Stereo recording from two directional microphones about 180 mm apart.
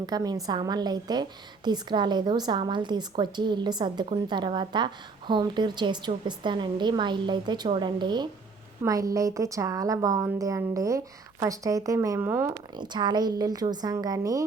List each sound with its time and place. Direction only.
0.0 s a woman's voice: 20° right (ahead or behind)
12.7 s a woman's voice: 25° right (ahead or behind)